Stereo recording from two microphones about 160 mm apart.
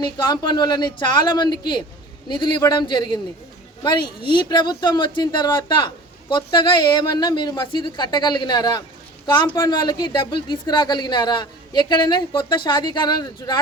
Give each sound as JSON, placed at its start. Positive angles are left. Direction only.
{"t": 0.0, "sound": "speech", "side_deg": 30}